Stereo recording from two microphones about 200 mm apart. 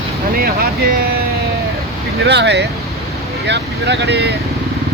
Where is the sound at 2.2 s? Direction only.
60° right (ahead or behind).